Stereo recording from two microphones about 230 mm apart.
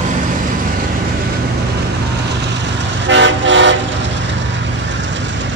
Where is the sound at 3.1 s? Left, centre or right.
Right.